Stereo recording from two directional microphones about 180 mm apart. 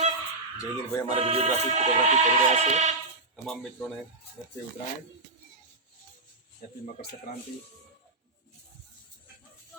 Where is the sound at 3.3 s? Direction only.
5° left (ahead or behind).